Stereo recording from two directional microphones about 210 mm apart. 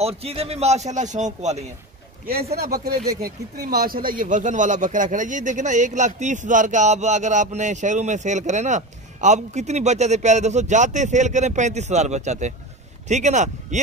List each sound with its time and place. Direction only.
0.0 s speech: 30° right (ahead or behind)
2.6 s speech: 45° right (ahead or behind)